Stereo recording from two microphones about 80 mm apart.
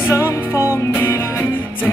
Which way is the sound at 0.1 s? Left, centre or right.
Left.